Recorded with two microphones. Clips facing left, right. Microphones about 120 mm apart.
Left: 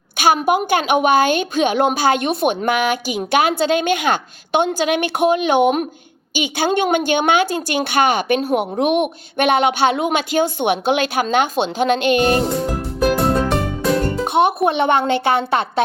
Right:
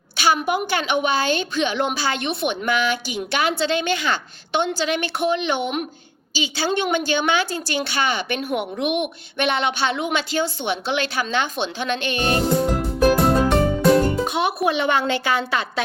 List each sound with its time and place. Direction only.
0.2 s a woman's voice: 45° left (ahead or behind)
12.4 s music: centre (ahead or behind)
14.3 s speech: 55° left (ahead or behind)